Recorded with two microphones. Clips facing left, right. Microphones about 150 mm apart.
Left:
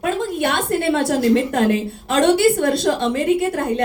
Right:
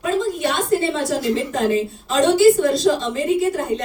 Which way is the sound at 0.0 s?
65° left (ahead or behind).